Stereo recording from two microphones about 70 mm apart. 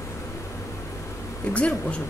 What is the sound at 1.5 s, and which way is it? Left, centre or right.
Speech, centre.